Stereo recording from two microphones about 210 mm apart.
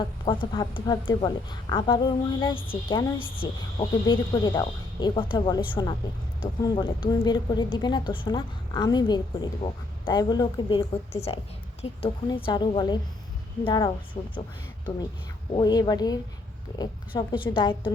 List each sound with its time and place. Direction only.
0.0 s a woman's voice: 25° left (ahead or behind)
15.5 s a woman's voice: 20° left (ahead or behind)